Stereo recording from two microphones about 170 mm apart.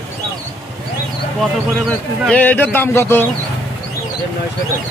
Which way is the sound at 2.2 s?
10° left (ahead or behind).